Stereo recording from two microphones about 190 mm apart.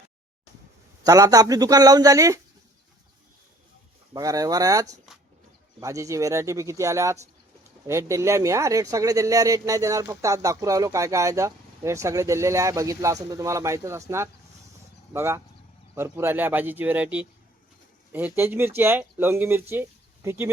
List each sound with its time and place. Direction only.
1.0 s a man's voice: 20° right (ahead or behind)
4.1 s speech: 20° right (ahead or behind)
19.7 s a sound: 15° right (ahead or behind)